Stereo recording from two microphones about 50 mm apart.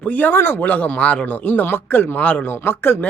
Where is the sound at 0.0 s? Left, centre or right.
Left.